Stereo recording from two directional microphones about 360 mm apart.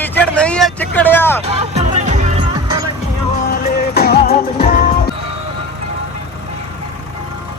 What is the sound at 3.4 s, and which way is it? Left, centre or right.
Music, left.